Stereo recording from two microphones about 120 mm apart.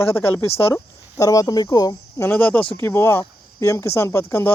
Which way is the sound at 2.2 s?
10° left (ahead or behind).